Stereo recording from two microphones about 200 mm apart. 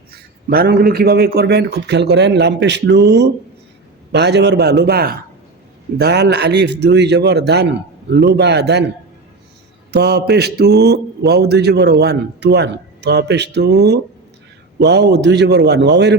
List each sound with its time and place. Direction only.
0.5 s speech: 50° right (ahead or behind)
9.9 s speech: 55° right (ahead or behind)